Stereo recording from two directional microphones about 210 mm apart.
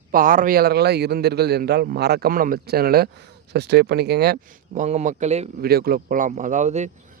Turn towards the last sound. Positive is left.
turn(degrees=-35)  # may be behind; listen again after turning